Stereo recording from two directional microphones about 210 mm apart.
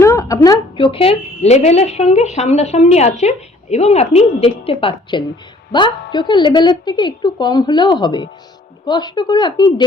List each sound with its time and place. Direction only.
0.0 s a woman's voice: 15° left (ahead or behind)